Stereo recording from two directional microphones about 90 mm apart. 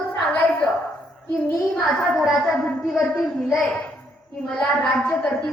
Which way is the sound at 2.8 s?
Centre (ahead or behind).